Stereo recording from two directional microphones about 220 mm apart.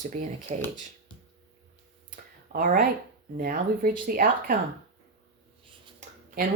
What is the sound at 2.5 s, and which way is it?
A woman's voice, 40° right (ahead or behind).